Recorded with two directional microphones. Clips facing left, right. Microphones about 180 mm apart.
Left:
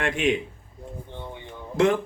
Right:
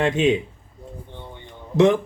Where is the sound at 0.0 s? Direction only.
25° right (ahead or behind).